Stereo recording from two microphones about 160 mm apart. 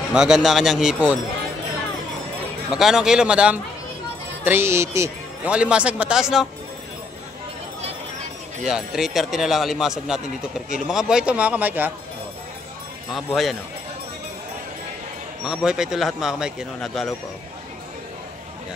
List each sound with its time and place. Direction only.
0.1 s a man's voice: 5° right (ahead or behind)
2.7 s a man's voice: 5° right (ahead or behind)
5.5 s speech: 5° right (ahead or behind)
8.6 s a man's voice: 5° right (ahead or behind)
13.1 s a man's voice: centre (ahead or behind)
15.4 s a man's voice: 5° right (ahead or behind)